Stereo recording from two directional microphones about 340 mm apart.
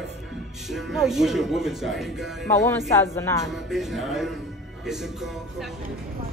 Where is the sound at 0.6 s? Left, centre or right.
Centre.